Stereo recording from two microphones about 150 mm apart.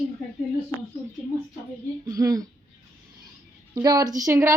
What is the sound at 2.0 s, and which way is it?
Speech, 25° right (ahead or behind).